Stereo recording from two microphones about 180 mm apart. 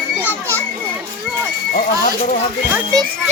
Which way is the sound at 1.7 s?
50° left (ahead or behind).